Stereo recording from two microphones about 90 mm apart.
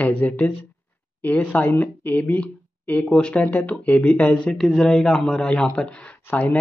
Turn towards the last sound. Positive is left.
turn(degrees=15)  # may be behind; listen again after turning